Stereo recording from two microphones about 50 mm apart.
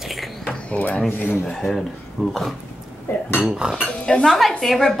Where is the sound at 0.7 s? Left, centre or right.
Left.